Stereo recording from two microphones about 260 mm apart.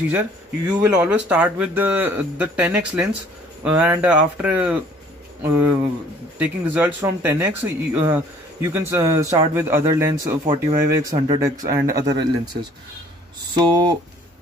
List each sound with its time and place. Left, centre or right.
0.1 s speech: centre
13.6 s speech: centre